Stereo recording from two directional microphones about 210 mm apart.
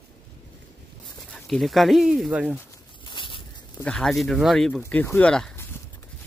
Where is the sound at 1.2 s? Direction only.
Centre (ahead or behind).